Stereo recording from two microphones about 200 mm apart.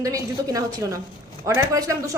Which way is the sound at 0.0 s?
15° right (ahead or behind).